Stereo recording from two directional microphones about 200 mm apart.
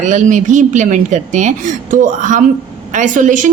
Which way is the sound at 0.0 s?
40° right (ahead or behind).